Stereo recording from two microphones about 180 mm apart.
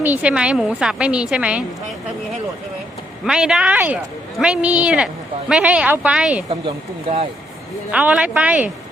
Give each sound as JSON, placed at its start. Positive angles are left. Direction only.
{"t": 0.0, "sound": "a woman's voice", "side_deg": -10}
{"t": 3.2, "sound": "a woman's voice", "side_deg": -5}
{"t": 6.5, "sound": "speech", "side_deg": -30}
{"t": 7.9, "sound": "a woman's voice", "side_deg": -5}